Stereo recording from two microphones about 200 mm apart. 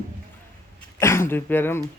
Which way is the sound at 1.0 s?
15° left (ahead or behind).